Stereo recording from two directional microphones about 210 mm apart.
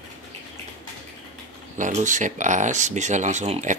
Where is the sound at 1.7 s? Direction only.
35° right (ahead or behind).